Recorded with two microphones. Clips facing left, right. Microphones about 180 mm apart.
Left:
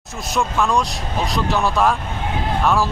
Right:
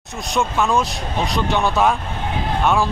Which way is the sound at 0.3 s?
Centre (ahead or behind).